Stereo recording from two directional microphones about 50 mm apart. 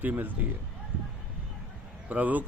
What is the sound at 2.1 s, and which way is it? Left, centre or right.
Speech, right.